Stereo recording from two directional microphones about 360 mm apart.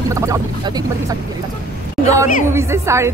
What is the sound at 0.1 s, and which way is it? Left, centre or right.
A woman's voice, centre.